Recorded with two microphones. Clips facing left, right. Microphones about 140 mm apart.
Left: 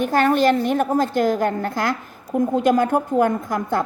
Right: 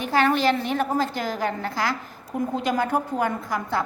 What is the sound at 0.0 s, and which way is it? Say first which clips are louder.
A woman's voice: left 4 dB; 45° left (ahead or behind).